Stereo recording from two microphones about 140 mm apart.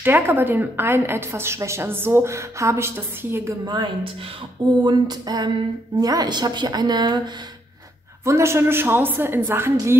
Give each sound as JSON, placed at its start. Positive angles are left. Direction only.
{"t": 0.0, "sound": "a woman's voice", "side_deg": -15}
{"t": 3.6, "sound": "a sound", "side_deg": -35}
{"t": 5.9, "sound": "a woman's voice", "side_deg": -25}
{"t": 8.3, "sound": "a woman's voice", "side_deg": -20}